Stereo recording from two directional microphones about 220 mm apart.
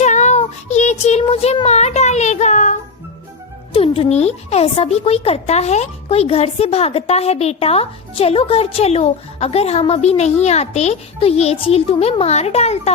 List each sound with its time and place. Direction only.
0.0 s child singing: 30° left (ahead or behind)
3.7 s speech: 25° left (ahead or behind)